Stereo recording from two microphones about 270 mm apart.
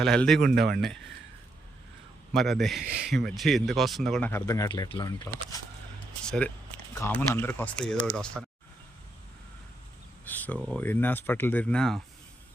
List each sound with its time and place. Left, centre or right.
0.0 s speech: centre
0.4 s speech: right
2.3 s speech: centre
6.2 s speech: centre
10.2 s speech: centre